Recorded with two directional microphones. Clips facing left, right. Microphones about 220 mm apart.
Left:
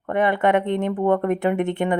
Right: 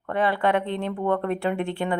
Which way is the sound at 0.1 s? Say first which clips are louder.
Left 4 dB; 20° left (ahead or behind).